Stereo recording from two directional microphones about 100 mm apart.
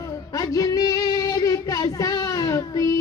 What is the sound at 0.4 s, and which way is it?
Child singing, 35° left (ahead or behind).